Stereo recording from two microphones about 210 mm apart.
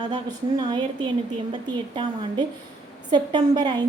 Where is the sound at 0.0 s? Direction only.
20° right (ahead or behind).